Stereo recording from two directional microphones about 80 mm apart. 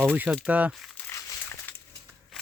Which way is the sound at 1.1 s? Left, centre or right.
Left.